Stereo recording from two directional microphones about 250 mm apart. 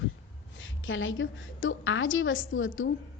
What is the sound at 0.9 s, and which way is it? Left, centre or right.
A woman's voice, left.